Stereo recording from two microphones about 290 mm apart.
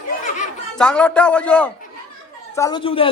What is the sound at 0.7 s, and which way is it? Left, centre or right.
A man's voice, centre.